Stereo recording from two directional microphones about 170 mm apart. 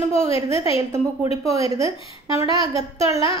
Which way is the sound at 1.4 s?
20° right (ahead or behind).